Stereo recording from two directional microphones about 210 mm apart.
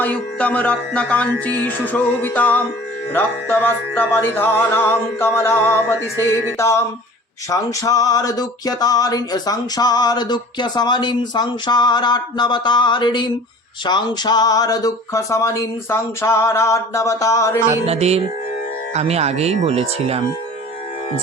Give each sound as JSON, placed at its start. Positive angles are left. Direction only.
{"t": 0.0, "sound": "speech", "side_deg": 5}
{"t": 7.5, "sound": "a sound", "side_deg": 15}
{"t": 13.8, "sound": "speech", "side_deg": 20}
{"t": 17.7, "sound": "speech", "side_deg": -30}